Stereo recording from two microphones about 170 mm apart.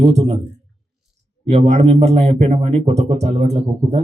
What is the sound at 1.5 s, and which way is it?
A man's voice, 40° right (ahead or behind).